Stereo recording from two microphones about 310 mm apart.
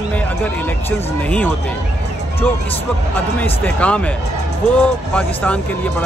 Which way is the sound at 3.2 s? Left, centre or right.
Centre.